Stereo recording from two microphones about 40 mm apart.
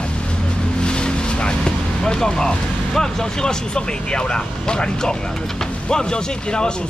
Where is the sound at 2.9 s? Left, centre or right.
Centre.